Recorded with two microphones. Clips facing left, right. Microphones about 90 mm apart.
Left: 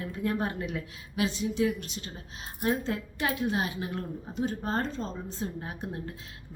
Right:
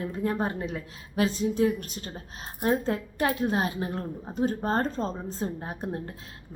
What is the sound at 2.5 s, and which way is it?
A woman's voice, 30° right (ahead or behind).